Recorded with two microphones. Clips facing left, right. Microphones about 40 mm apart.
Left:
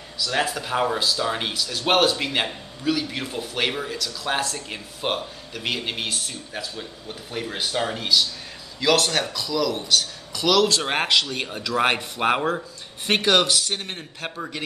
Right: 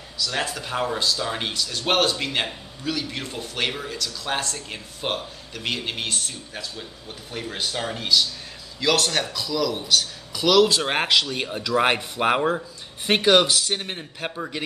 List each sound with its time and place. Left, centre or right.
0.2 s speech: centre